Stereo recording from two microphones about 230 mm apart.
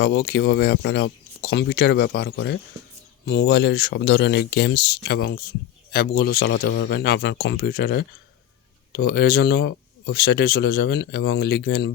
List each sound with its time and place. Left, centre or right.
0.0 s speech: left